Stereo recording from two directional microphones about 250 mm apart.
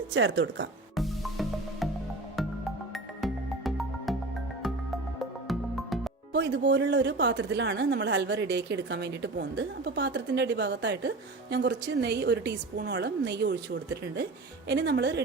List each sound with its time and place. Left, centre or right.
0.1 s a woman's voice: right
0.9 s music: centre
2.9 s music: centre
5.5 s music: centre
6.3 s a woman's voice: right